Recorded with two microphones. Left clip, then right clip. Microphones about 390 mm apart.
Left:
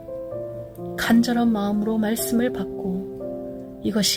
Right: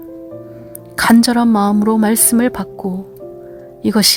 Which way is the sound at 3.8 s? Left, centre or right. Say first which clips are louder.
Right 9 dB; right.